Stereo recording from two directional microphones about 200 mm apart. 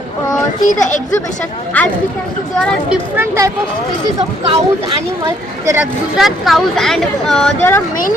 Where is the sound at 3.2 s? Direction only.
15° right (ahead or behind).